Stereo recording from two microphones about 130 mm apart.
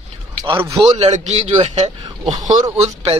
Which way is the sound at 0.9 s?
60° right (ahead or behind).